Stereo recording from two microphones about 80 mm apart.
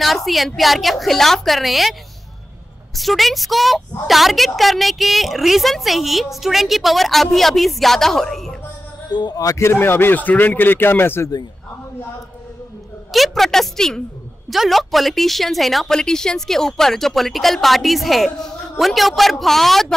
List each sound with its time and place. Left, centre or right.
0.0 s a woman's voice: centre
3.0 s a woman's voice: centre
9.1 s a man's voice: left
9.6 s speech: left
13.1 s a woman's voice: centre